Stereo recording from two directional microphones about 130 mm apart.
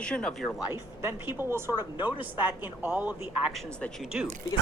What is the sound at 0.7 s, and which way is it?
Speech, 15° right (ahead or behind).